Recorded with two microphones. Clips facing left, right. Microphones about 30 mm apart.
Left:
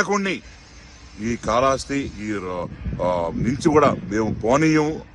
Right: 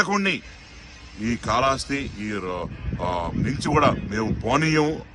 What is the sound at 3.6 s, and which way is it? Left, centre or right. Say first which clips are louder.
Speech: left 4 dB; right.